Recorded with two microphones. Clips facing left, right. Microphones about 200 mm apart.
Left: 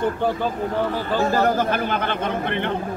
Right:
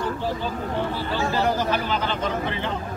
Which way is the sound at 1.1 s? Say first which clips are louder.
Left 4 dB; 45° left (ahead or behind).